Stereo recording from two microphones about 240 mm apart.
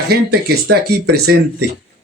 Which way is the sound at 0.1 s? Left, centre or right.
Right.